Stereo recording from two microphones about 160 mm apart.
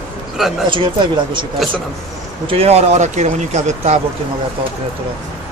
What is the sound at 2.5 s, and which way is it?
Speech, 40° right (ahead or behind).